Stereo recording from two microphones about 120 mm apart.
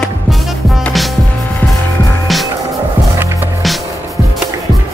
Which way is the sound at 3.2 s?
15° right (ahead or behind).